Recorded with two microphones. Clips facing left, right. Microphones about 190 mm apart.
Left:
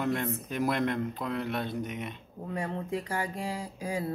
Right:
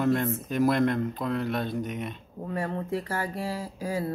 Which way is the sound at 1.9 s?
45° right (ahead or behind).